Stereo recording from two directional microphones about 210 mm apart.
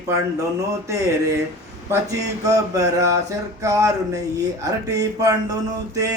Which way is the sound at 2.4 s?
15° right (ahead or behind).